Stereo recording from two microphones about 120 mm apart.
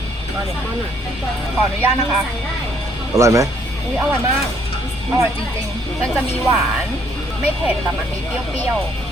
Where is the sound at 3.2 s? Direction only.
25° right (ahead or behind).